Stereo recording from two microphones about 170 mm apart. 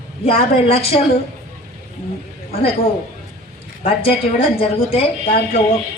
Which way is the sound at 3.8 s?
35° left (ahead or behind).